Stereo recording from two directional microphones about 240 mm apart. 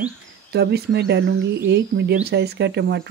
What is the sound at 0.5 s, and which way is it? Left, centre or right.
Speech, right.